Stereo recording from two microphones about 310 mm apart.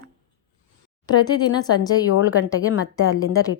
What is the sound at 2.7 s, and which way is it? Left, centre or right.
Speech, left.